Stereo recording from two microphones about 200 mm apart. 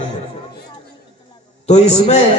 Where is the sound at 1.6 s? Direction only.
35° left (ahead or behind).